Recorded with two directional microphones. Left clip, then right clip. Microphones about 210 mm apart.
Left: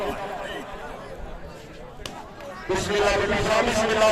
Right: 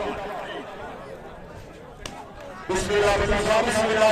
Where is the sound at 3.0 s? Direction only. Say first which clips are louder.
Right 1 dB; 15° right (ahead or behind).